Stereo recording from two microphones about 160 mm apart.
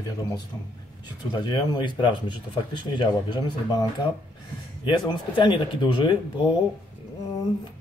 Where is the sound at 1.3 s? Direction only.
30° left (ahead or behind).